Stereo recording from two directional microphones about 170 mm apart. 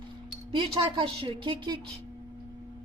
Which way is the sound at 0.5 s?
30° right (ahead or behind).